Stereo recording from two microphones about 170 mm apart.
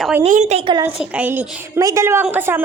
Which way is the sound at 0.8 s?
10° right (ahead or behind).